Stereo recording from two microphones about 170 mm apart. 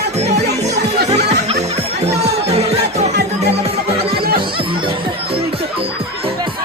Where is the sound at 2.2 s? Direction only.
40° right (ahead or behind).